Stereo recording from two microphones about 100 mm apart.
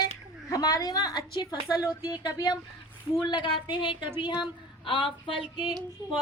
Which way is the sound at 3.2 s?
55° left (ahead or behind).